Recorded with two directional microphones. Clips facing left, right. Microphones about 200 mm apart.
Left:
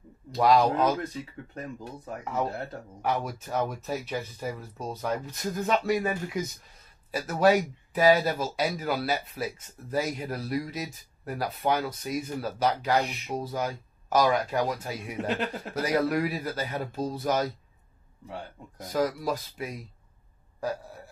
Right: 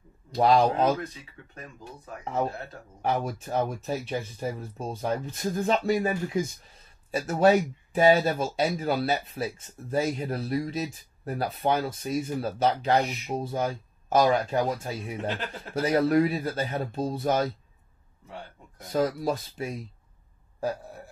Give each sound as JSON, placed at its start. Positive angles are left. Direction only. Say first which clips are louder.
{"t": 0.4, "sound": "speech", "louder": "right 1 dB", "side_deg": -30}
{"t": 3.0, "sound": "speech", "louder": "right 2 dB", "side_deg": -30}
{"t": 18.9, "sound": "speech", "louder": "right 2 dB", "side_deg": -30}